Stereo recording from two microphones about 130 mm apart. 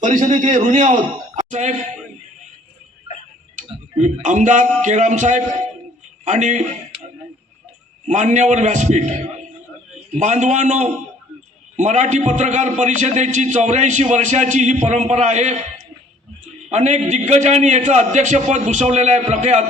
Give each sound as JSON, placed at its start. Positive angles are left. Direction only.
{"t": 0.0, "sound": "a man's voice", "side_deg": -75}
{"t": 3.6, "sound": "a man's voice", "side_deg": -65}
{"t": 8.0, "sound": "a man's voice", "side_deg": -65}
{"t": 16.6, "sound": "a man's voice", "side_deg": -60}